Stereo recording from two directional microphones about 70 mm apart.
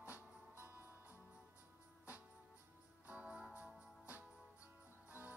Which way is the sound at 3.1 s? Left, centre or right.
Centre.